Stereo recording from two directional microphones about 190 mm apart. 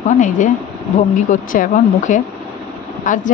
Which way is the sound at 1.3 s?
45° left (ahead or behind).